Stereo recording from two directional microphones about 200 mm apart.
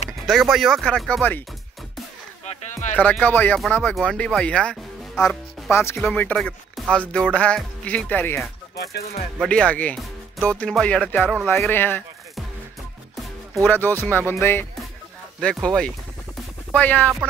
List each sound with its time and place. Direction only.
0.3 s speech: centre (ahead or behind)
2.7 s music: 40° left (ahead or behind)
3.0 s speech: 10° left (ahead or behind)
8.7 s music: 55° left (ahead or behind)
9.4 s speech: 5° left (ahead or behind)
13.7 s speech: 10° left (ahead or behind)